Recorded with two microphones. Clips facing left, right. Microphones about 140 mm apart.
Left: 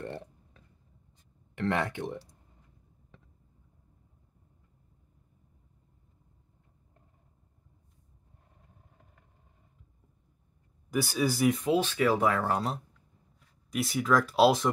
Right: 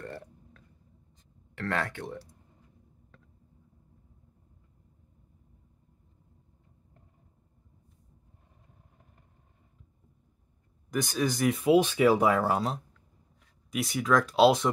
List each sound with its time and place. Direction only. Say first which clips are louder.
0.0 s burping: left 2 dB; 20° left (ahead or behind)
1.5 s speech: left 2 dB; 15° left (ahead or behind)
10.9 s speech: even; 5° left (ahead or behind)
11.6 s speech: right 4 dB; 15° right (ahead or behind)